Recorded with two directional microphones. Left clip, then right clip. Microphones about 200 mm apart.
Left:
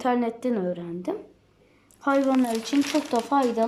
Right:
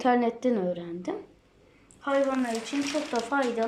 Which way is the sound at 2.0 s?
25° left (ahead or behind).